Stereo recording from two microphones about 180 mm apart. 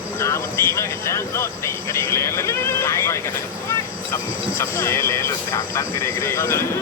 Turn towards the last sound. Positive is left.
turn(degrees=15)  # may be behind; listen again after turning